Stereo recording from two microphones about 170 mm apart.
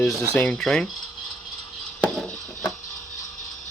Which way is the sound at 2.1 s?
5° left (ahead or behind).